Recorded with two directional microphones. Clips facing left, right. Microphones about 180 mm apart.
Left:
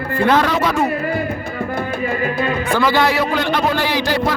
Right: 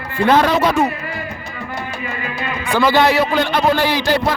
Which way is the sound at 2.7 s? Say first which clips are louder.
Right 3 dB; 25° right (ahead or behind).